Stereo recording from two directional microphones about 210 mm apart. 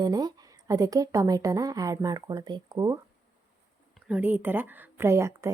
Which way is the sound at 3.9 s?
5° right (ahead or behind).